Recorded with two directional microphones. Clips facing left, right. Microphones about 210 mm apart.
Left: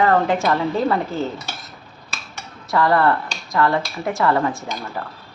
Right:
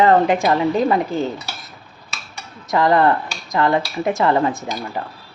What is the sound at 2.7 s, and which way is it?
Speech, 20° right (ahead or behind).